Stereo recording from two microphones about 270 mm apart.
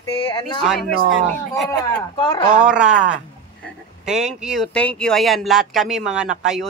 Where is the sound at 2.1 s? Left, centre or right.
Centre.